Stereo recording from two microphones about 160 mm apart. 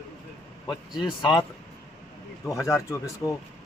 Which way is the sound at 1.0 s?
30° left (ahead or behind).